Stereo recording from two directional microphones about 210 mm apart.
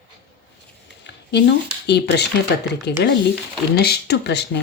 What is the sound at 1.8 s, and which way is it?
Speech, 55° left (ahead or behind).